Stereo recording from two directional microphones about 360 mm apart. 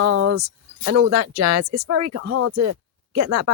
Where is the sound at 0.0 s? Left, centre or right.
Right.